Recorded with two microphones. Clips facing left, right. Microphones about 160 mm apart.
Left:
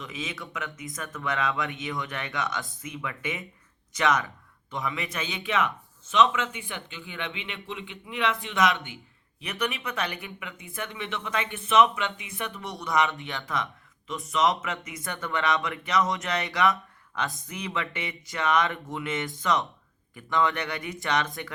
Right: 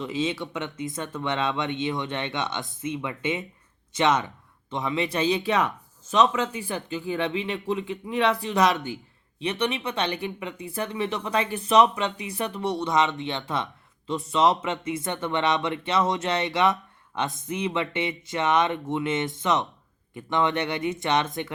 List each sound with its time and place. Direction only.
0.0 s speech: 30° right (ahead or behind)